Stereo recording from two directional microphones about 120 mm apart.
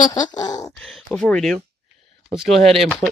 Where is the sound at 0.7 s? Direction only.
5° left (ahead or behind).